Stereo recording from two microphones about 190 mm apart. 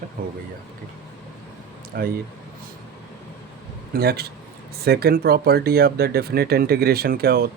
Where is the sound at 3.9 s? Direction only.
55° right (ahead or behind).